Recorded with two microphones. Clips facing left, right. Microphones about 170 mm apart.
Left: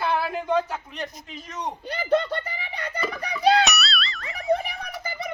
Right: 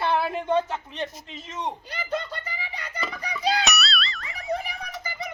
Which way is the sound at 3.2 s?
60° left (ahead or behind).